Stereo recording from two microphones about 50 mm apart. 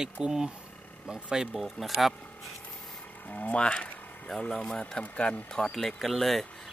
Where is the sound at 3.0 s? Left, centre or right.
Left.